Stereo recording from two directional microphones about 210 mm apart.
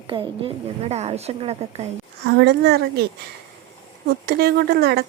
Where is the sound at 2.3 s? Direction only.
50° right (ahead or behind).